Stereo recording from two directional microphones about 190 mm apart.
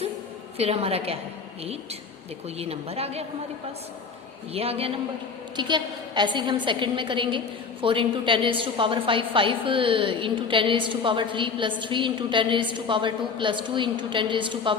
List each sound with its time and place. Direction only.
0.5 s a woman's voice: 30° right (ahead or behind)
2.6 s a woman's voice: 30° right (ahead or behind)
4.5 s a woman's voice: 30° right (ahead or behind)